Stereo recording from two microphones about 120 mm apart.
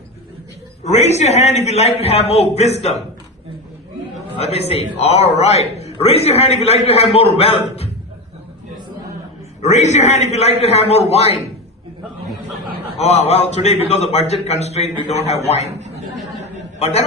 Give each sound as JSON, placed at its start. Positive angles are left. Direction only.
{"t": 0.9, "sound": "a man's voice", "side_deg": 65}
{"t": 4.4, "sound": "a man's voice", "side_deg": 60}
{"t": 9.6, "sound": "a man's voice", "side_deg": 70}
{"t": 13.0, "sound": "a man's voice", "side_deg": 60}
{"t": 15.6, "sound": "speech", "side_deg": -65}